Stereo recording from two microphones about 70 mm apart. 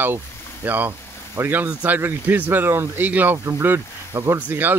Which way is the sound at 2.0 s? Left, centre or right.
Right.